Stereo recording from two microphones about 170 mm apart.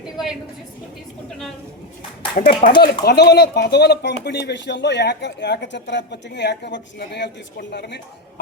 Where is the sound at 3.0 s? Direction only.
75° left (ahead or behind).